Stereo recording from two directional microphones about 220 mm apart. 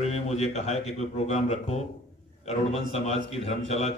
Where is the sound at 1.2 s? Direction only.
30° left (ahead or behind).